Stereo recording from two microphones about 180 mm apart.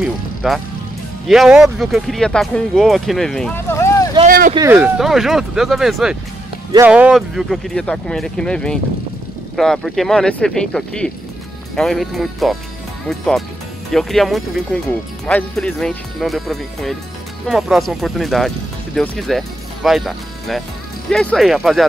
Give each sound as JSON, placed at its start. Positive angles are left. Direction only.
{"t": 0.0, "sound": "music", "side_deg": 0}
{"t": 1.2, "sound": "speech", "side_deg": 0}
{"t": 3.5, "sound": "a sound", "side_deg": 15}
{"t": 4.3, "sound": "vehicle", "side_deg": -55}
{"t": 4.7, "sound": "speech", "side_deg": -5}